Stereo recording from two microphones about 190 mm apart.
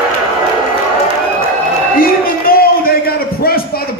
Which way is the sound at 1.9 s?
50° left (ahead or behind).